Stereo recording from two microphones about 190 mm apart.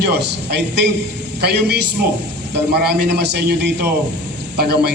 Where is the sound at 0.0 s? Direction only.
60° right (ahead or behind).